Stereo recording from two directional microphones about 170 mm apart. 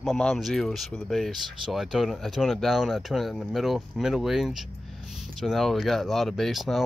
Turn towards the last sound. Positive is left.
turn(degrees=0)  # may be behind; listen again after turning